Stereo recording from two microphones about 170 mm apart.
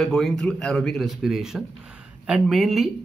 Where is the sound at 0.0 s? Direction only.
5° left (ahead or behind).